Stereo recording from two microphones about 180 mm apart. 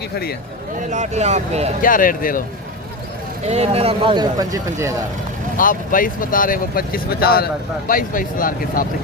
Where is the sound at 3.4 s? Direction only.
35° right (ahead or behind); by 5.0 s 20° right (ahead or behind).